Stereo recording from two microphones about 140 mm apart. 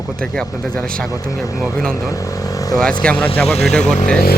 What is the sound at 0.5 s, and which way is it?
Speech, 25° left (ahead or behind).